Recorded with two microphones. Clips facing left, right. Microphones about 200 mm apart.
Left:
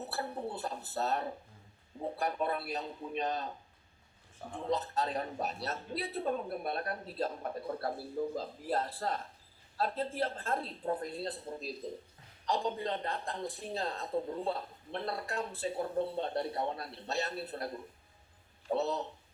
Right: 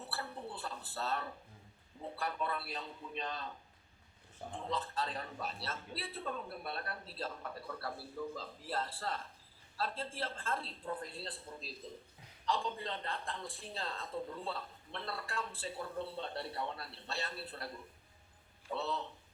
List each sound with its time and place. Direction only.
0.0 s a sound: 40° left (ahead or behind)
2.0 s a man's voice: 45° left (ahead or behind)
4.7 s a man's voice: 40° left (ahead or behind)
18.7 s a man's voice: 40° left (ahead or behind)